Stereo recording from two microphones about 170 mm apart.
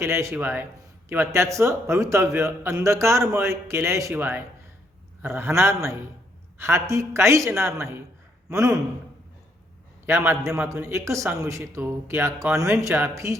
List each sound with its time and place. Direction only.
0.0 s a man's voice: 15° right (ahead or behind)
10.1 s a man's voice: 15° right (ahead or behind)